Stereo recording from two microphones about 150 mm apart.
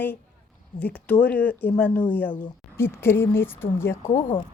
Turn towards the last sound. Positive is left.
turn(degrees=35)  # may be behind; listen again after turning